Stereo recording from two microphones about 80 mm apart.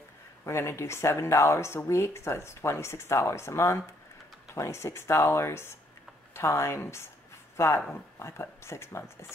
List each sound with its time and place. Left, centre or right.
0.5 s speech: left